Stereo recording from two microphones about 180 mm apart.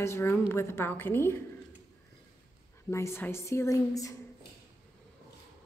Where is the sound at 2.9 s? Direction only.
15° left (ahead or behind).